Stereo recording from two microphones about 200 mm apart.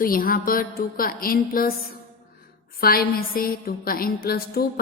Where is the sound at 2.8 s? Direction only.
50° left (ahead or behind).